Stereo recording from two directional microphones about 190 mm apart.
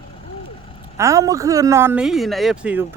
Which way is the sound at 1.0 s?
15° right (ahead or behind).